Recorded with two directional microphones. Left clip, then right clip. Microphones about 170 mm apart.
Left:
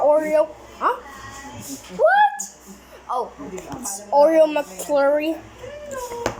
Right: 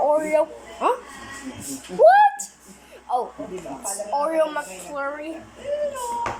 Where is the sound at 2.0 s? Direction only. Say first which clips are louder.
Right 3 dB; 15° right (ahead or behind).